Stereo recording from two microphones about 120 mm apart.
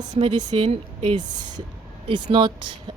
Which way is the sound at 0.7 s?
50° right (ahead or behind).